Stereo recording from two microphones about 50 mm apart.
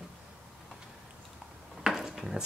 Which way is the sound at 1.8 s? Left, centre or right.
Centre.